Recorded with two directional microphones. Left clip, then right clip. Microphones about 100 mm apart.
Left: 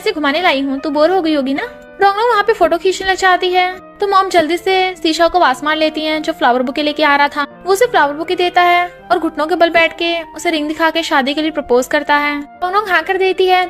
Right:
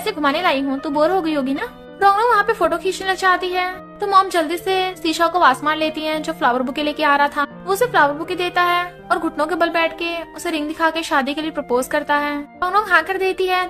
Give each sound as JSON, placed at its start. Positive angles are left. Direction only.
{"t": 0.0, "sound": "speech", "side_deg": 35}